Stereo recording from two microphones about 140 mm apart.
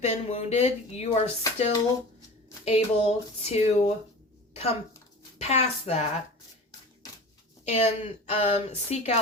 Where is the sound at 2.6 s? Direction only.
45° left (ahead or behind).